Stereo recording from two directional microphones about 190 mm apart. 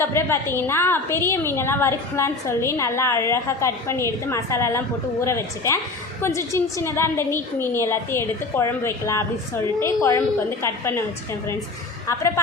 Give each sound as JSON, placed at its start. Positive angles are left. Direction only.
{"t": 0.0, "sound": "a woman's voice", "side_deg": 15}